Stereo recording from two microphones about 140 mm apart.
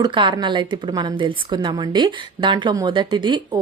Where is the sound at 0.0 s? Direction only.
35° right (ahead or behind).